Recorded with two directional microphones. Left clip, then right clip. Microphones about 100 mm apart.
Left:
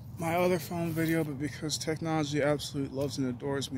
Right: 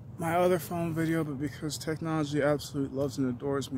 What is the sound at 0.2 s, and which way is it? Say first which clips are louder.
Speech: right 2 dB; 90° right.